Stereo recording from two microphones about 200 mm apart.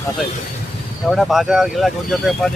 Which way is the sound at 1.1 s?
Centre (ahead or behind).